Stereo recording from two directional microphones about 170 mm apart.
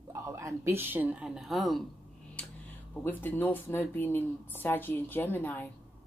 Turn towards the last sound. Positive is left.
turn(degrees=10)  # may be behind; listen again after turning